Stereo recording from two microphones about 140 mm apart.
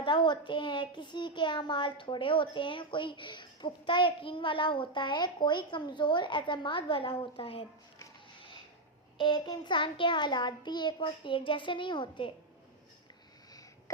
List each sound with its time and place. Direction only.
0.0 s a child's voice: 35° left (ahead or behind)
9.1 s a child's voice: 35° left (ahead or behind)